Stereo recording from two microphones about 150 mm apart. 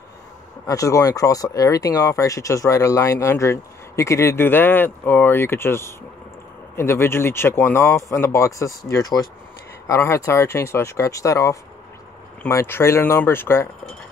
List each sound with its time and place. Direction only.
0.7 s speech: 20° left (ahead or behind)